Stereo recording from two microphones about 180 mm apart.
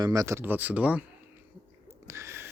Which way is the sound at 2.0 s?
15° right (ahead or behind).